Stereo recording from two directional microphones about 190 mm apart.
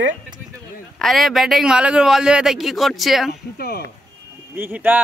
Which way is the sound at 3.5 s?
55° left (ahead or behind).